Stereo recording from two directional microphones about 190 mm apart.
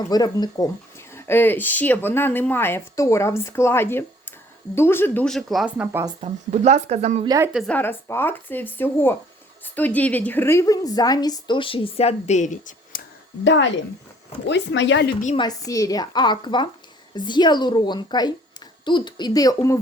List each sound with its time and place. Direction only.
0.1 s a woman's voice: 20° left (ahead or behind); by 6.1 s 10° right (ahead or behind)
6.1 s speech: 35° right (ahead or behind)
7.3 s a woman's voice: 15° right (ahead or behind)
7.7 s a woman's voice: 10° left (ahead or behind); by 13.0 s 40° left (ahead or behind)
13.4 s speech: 70° left (ahead or behind)
15.4 s a woman's voice: 20° left (ahead or behind)